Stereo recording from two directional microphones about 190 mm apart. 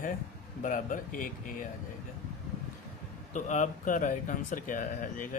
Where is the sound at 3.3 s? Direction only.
40° left (ahead or behind).